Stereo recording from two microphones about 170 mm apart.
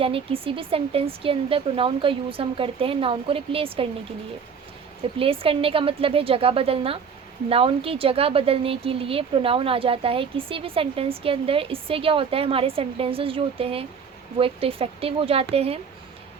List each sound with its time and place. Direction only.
0.0 s speech: 35° right (ahead or behind)
5.2 s speech: 35° right (ahead or behind)